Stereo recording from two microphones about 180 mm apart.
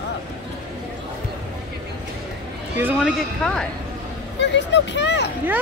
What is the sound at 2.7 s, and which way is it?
Speech, 10° right (ahead or behind).